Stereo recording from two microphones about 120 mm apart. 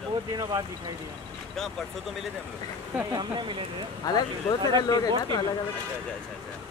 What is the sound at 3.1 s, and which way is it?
Speech, 40° right (ahead or behind).